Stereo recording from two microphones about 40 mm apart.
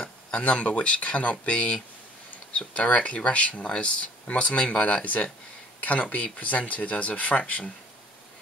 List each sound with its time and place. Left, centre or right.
0.4 s speech: left
5.0 s speech: left